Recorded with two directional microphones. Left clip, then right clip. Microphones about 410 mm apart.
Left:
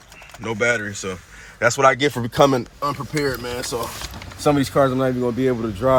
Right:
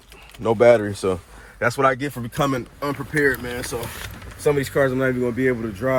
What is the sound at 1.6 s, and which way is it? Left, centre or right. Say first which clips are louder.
Speech: left 4 dB; centre.